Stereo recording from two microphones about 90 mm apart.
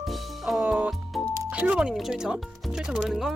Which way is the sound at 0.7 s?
15° right (ahead or behind).